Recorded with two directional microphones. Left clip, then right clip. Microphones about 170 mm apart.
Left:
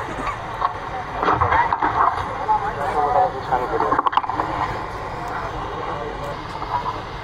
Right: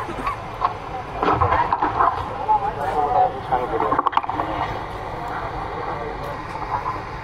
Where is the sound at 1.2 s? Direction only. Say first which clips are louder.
Left 1 dB; 30° right (ahead or behind).